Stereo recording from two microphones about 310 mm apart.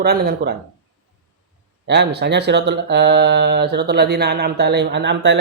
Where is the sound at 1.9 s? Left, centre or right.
Right.